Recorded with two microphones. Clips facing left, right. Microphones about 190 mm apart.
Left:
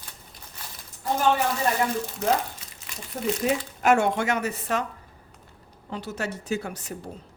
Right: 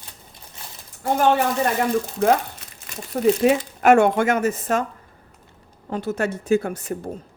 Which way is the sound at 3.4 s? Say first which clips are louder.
Right 7 dB; 60° right (ahead or behind).